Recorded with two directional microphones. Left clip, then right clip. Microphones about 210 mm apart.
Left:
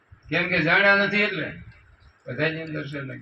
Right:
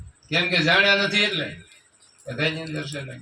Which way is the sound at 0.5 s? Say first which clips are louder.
Even; 55° right (ahead or behind).